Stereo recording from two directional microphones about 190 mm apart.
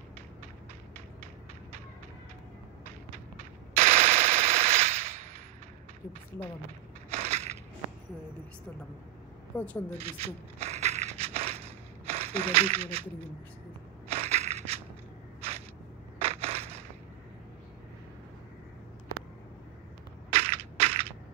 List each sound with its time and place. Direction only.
3.7 s machine gun: 35° right (ahead or behind)
7.1 s crushing: 35° right (ahead or behind)
9.5 s speech: 10° left (ahead or behind)
9.9 s a sound: 35° right (ahead or behind)
14.1 s crushing: 35° right (ahead or behind)
16.2 s crushing: 35° right (ahead or behind)
20.2 s crushing: 30° right (ahead or behind)